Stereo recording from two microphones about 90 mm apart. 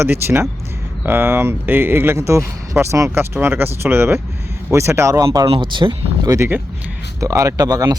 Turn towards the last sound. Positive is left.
turn(degrees=-45)  # may be behind; listen again after turning